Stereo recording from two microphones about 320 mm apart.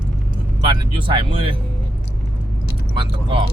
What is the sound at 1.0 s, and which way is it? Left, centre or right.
Speech, centre.